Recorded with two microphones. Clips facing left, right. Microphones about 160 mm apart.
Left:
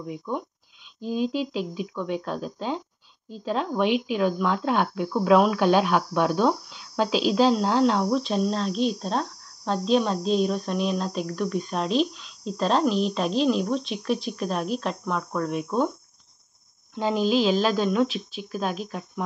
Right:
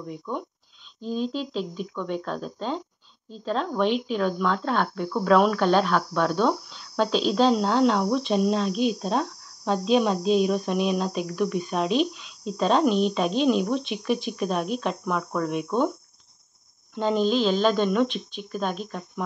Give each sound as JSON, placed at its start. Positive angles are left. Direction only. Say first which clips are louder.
{"t": 0.0, "sound": "speech", "louder": "left 1 dB", "side_deg": 10}
{"t": 16.9, "sound": "speech", "louder": "even", "side_deg": 5}